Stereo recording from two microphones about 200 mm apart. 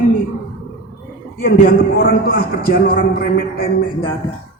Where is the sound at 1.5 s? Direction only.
50° left (ahead or behind).